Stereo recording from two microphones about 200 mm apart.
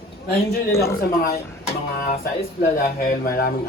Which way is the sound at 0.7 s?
15° left (ahead or behind).